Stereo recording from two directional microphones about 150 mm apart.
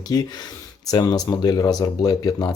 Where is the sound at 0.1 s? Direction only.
25° left (ahead or behind).